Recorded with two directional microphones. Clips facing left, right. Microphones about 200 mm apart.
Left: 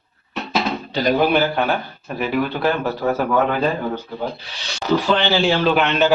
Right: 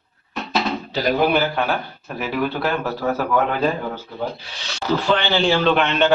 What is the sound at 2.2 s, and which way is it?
A man's voice, centre (ahead or behind).